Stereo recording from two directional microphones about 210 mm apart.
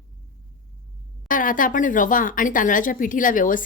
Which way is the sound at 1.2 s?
40° left (ahead or behind).